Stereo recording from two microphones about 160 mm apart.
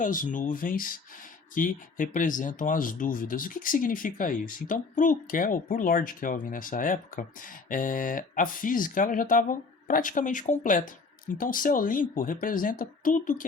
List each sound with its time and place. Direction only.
0.0 s speech: 55° left (ahead or behind)